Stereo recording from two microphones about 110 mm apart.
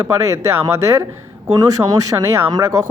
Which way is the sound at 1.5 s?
35° right (ahead or behind).